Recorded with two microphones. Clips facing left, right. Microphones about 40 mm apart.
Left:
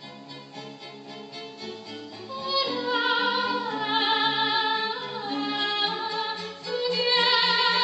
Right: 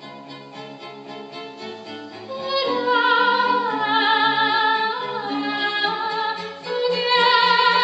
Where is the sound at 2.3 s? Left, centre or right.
Centre.